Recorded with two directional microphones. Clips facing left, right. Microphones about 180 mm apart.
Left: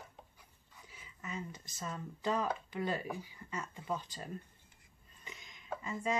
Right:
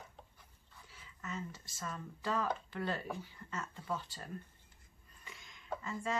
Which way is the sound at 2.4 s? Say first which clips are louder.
Left 1 dB; 15° left (ahead or behind).